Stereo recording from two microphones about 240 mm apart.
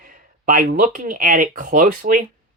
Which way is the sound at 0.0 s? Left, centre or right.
Right.